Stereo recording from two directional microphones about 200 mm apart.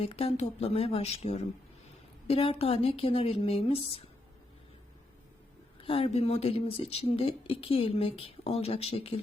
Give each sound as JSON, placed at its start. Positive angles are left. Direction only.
{"t": 0.0, "sound": "speech", "side_deg": 30}
{"t": 5.8, "sound": "speech", "side_deg": 30}